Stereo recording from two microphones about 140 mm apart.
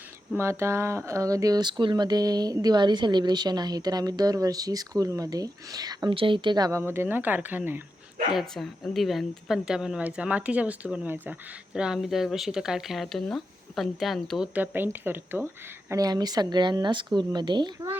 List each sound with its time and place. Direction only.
0.3 s speech: 20° right (ahead or behind)
8.4 s a woman's voice: centre (ahead or behind); by 15.4 s 15° right (ahead or behind)
15.9 s speech: 25° right (ahead or behind)